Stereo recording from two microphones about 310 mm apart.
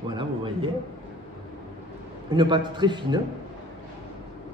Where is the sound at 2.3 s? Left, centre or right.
Centre.